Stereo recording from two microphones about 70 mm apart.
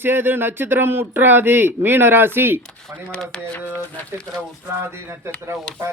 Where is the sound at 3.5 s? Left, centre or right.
Left.